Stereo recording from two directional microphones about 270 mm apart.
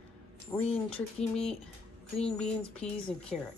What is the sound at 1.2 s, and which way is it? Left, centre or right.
Speech, left.